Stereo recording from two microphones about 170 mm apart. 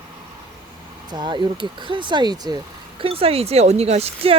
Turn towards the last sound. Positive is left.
turn(degrees=-35)  # may be behind; listen again after turning